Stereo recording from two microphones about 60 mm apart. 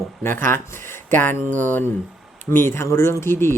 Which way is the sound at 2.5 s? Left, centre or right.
Left.